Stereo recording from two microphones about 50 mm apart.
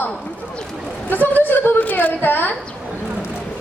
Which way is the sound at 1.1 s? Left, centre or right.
Left.